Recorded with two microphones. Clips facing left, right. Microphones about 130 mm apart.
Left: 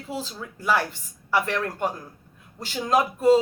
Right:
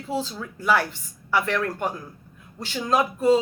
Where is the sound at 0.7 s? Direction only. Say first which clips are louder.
Right 2 dB; 35° left (ahead or behind).